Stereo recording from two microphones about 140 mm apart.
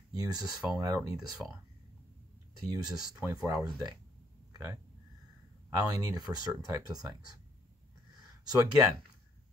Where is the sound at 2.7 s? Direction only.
25° right (ahead or behind).